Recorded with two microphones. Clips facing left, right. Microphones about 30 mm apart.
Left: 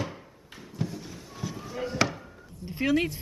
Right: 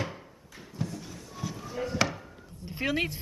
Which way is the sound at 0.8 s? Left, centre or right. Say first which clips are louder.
Left 2 dB; centre.